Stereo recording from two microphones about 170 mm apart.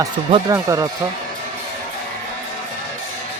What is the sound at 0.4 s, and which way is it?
Speech, 20° right (ahead or behind).